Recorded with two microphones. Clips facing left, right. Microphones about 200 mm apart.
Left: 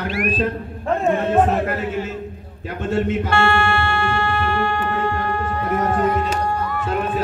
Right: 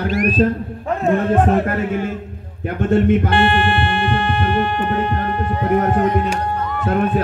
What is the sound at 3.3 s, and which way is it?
Music, 20° right (ahead or behind).